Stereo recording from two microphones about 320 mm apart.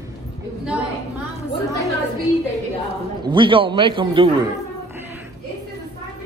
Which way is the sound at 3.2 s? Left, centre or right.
Centre.